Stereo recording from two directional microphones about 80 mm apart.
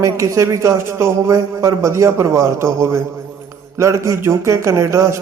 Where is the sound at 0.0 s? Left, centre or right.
Right.